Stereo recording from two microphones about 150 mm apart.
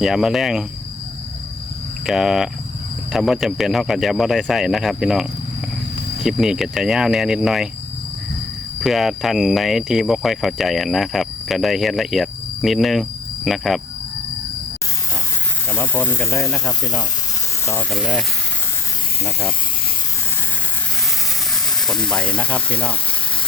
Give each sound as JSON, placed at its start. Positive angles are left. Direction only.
{"t": 0.0, "sound": "speech", "side_deg": -5}
{"t": 2.0, "sound": "speech", "side_deg": -5}
{"t": 6.2, "sound": "speech", "side_deg": -5}
{"t": 8.8, "sound": "speech", "side_deg": 0}
{"t": 15.7, "sound": "speech", "side_deg": 15}
{"t": 16.4, "sound": "speech", "side_deg": 0}
{"t": 16.8, "sound": "speech", "side_deg": 25}
{"t": 17.9, "sound": "speech", "side_deg": 0}
{"t": 21.8, "sound": "speech", "side_deg": 5}